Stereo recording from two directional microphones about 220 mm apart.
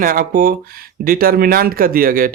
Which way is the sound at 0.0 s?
40° right (ahead or behind).